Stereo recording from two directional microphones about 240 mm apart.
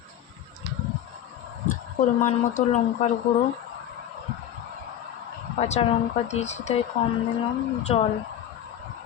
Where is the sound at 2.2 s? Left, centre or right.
Left.